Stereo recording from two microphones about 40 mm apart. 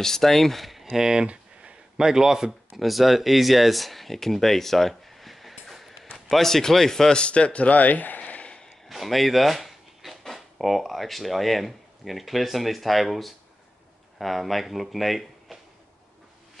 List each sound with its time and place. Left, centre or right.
0.0 s speech: centre
1.2 s a sound: right
2.0 s speech: centre
2.8 s speech: centre
7.2 s a man's voice: left
8.8 s speech: centre